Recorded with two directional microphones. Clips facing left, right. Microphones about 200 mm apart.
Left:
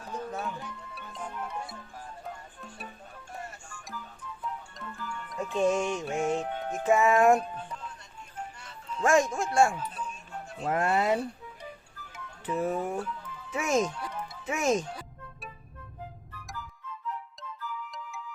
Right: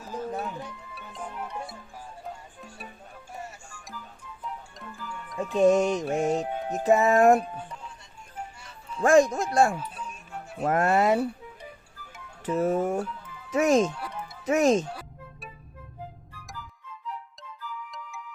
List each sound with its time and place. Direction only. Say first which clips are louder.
0.0 s music: right 3 dB; 5° right (ahead or behind)
2.6 s speech: even; 10° right (ahead or behind)
3.3 s music: right 1 dB; 10° right (ahead or behind)
5.5 s music: right 6 dB; 40° right (ahead or behind)
7.3 s speech: right 3 dB; 5° right (ahead or behind)
8.4 s music: right 1 dB; 10° right (ahead or behind)
9.0 s music: right 5 dB; 35° right (ahead or behind)
9.7 s music: even; 10° right (ahead or behind)
10.6 s speech: right 4 dB; 65° right (ahead or behind)
10.8 s speech: right 4 dB; 45° right (ahead or behind)
12.5 s speech: right 5 dB; 40° right (ahead or behind)
13.5 s music: right 6 dB; 40° right (ahead or behind)